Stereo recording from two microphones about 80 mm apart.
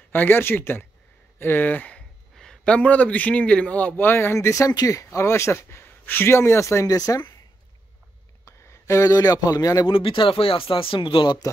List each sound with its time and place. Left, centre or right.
0.1 s a man's voice: left
8.5 s a sound: left
9.5 s speech: left
9.8 s speech: left